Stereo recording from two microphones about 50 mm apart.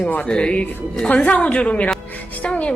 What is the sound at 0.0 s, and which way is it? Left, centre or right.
Speech, left.